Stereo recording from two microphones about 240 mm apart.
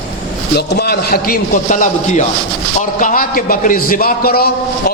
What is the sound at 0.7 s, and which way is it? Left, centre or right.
A man's voice, left.